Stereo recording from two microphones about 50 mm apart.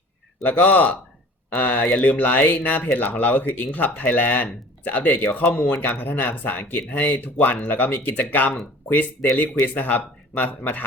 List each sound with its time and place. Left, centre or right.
0.4 s speech: left